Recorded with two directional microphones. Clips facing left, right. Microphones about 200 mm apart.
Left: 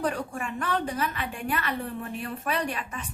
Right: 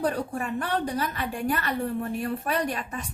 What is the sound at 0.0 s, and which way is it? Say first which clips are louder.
A woman's voice: right 2 dB; 35° right (ahead or behind).